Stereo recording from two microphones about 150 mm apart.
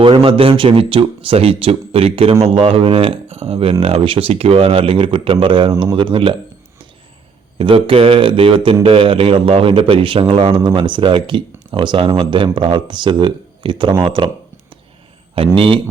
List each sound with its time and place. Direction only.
0.0 s speech: 35° right (ahead or behind)
7.6 s speech: 35° right (ahead or behind)
15.5 s speech: 35° right (ahead or behind)